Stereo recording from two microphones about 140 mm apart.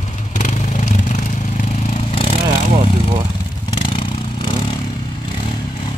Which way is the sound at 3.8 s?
35° left (ahead or behind).